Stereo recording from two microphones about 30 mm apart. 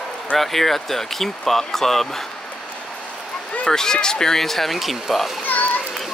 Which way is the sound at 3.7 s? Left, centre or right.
Left.